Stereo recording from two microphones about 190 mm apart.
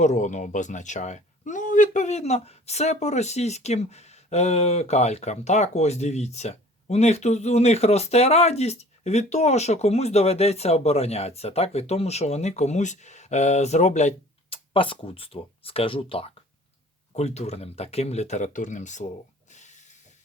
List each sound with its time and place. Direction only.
0.0 s speech: 40° left (ahead or behind)
19.5 s hiss: 40° left (ahead or behind)